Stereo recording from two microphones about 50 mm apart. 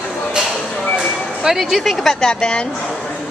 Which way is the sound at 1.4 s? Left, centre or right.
Centre.